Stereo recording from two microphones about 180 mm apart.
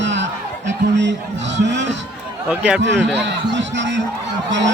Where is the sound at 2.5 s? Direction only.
5° right (ahead or behind).